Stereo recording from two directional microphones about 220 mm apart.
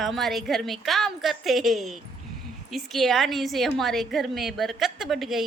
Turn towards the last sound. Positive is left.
turn(degrees=0)  # may be behind; listen again after turning